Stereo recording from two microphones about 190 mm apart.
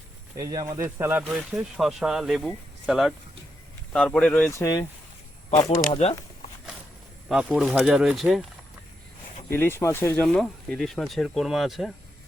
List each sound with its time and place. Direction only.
0.3 s speech: 20° right (ahead or behind); by 4.5 s 5° left (ahead or behind)
4.5 s speech: 20° left (ahead or behind)
5.6 s speech: 35° left (ahead or behind)
7.3 s speech: centre (ahead or behind)
9.5 s speech: 10° left (ahead or behind)